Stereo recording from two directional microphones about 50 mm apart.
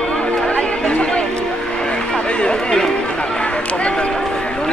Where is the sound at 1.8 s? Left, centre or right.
Centre.